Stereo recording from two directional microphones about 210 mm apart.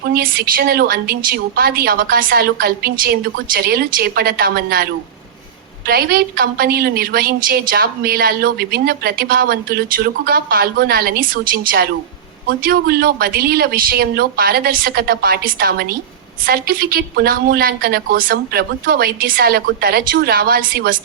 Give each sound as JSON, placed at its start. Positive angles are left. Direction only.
{"t": 0.0, "sound": "a woman's voice", "side_deg": -45}